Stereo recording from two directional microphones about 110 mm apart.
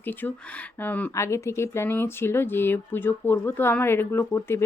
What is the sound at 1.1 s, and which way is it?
Speech, 25° left (ahead or behind).